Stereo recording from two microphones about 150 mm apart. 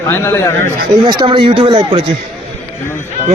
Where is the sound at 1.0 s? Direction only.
30° right (ahead or behind).